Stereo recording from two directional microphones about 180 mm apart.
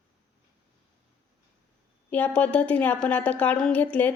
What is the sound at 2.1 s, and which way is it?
A woman's voice, 10° left (ahead or behind).